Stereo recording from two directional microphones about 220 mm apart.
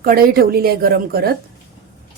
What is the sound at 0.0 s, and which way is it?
A woman's voice, 40° right (ahead or behind).